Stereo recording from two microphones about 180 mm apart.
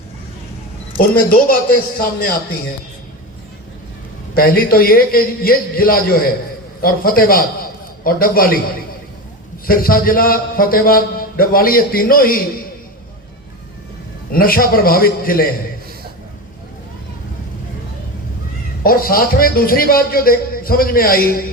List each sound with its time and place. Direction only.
0.9 s a man's voice: 50° left (ahead or behind)
4.4 s a man's voice: 55° left (ahead or behind)
9.6 s a man's voice: 55° left (ahead or behind)
14.3 s a man's voice: 55° left (ahead or behind)
18.8 s a man's voice: 55° left (ahead or behind)